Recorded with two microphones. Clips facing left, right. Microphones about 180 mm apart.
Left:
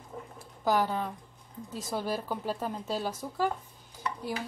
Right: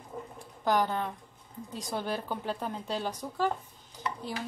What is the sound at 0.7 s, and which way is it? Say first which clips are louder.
A woman's voice: even; 5° left (ahead or behind).